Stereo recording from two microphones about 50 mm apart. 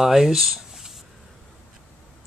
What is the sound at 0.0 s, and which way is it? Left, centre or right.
Speech, centre.